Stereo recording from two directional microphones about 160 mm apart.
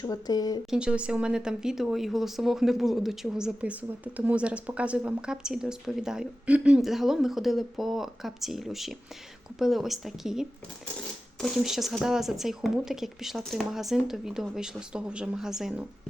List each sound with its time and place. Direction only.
0.0 s speech: 25° left (ahead or behind)
0.7 s speech: 5° right (ahead or behind)